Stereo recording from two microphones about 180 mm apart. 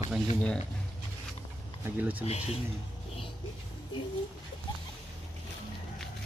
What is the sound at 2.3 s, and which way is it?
Speech, 35° left (ahead or behind).